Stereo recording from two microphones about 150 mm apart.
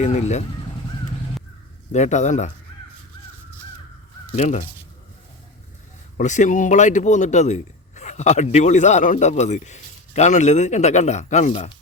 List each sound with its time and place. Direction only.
0.0 s a man's voice: 50° left (ahead or behind)
1.9 s a man's voice: 50° left (ahead or behind)
4.3 s speech: 50° left (ahead or behind)
6.1 s a man's voice: 55° left (ahead or behind)